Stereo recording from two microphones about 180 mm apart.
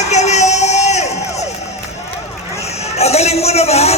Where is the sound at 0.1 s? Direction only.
40° left (ahead or behind).